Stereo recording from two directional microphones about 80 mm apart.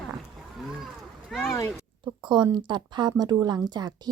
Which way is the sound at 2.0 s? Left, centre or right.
Right.